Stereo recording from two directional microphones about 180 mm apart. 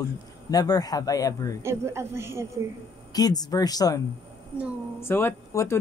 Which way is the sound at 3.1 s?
20° left (ahead or behind).